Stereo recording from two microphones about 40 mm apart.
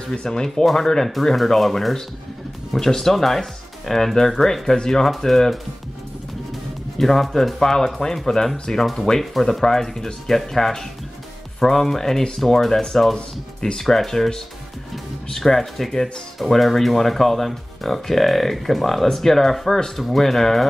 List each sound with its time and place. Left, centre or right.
0.1 s speech: centre
7.0 s speech: centre
13.1 s speech: centre